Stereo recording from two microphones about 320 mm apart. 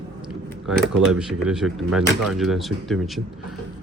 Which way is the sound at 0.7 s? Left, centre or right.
Centre.